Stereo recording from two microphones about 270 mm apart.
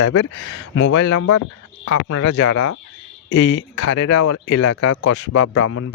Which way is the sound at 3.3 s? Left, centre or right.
Left.